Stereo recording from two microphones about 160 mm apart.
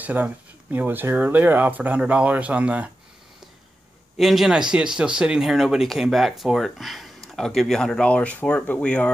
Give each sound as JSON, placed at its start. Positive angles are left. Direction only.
{"t": 0.0, "sound": "speech", "side_deg": -10}
{"t": 4.2, "sound": "speech", "side_deg": 0}